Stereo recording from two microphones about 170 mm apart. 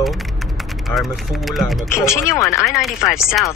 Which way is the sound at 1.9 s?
15° left (ahead or behind).